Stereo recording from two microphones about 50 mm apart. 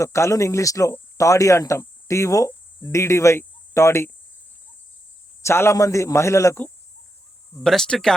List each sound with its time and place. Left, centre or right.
0.0 s speech: left
5.4 s a man's voice: left
7.9 s speech: centre